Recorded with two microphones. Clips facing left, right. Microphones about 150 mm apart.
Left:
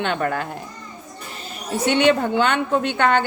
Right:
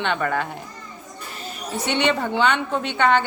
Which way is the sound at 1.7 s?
50° left (ahead or behind).